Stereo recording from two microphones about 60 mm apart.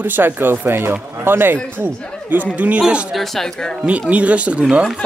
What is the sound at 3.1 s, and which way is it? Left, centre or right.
Speech, centre.